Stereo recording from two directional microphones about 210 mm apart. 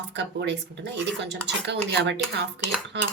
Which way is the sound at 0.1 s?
55° right (ahead or behind).